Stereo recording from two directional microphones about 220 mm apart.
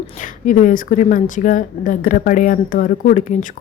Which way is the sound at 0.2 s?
35° left (ahead or behind).